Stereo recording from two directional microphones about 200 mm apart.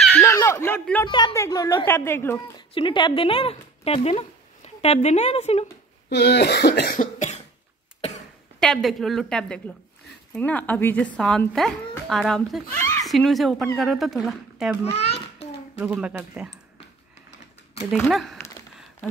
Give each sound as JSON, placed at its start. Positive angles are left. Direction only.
{"t": 0.0, "sound": "a sound", "side_deg": 10}
{"t": 1.0, "sound": "a woman's voice", "side_deg": 20}
{"t": 2.7, "sound": "a woman's voice", "side_deg": 25}
{"t": 6.0, "sound": "speech", "side_deg": 55}
{"t": 8.5, "sound": "a woman's voice", "side_deg": 0}
{"t": 15.8, "sound": "speech", "side_deg": -5}
{"t": 17.9, "sound": "speech", "side_deg": 0}